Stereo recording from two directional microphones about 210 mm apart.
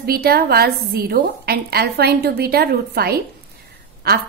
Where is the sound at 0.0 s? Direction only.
50° right (ahead or behind).